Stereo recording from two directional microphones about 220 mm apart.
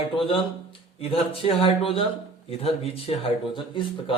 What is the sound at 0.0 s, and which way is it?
A man's voice, 25° left (ahead or behind).